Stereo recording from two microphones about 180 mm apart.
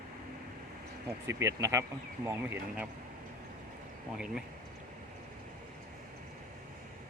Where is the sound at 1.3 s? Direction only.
15° right (ahead or behind).